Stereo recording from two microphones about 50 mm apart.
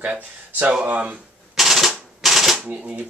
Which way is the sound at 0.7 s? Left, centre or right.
Right.